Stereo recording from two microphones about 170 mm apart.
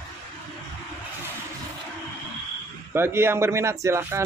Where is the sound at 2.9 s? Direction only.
15° right (ahead or behind).